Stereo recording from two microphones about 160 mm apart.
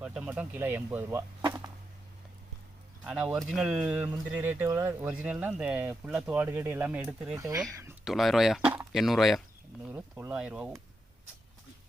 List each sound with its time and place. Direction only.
0.0 s speech: 5° right (ahead or behind)
3.0 s speech: 5° right (ahead or behind)
7.3 s speech: 20° right (ahead or behind)
8.0 s speech: centre (ahead or behind)
9.8 s speech: 15° right (ahead or behind)